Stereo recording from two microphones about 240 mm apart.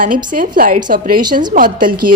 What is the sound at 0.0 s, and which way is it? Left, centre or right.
A woman's voice, right.